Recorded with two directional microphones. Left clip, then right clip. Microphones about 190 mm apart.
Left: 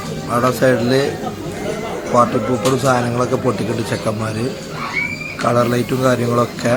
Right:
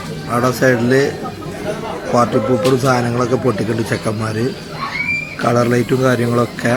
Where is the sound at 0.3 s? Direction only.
5° right (ahead or behind).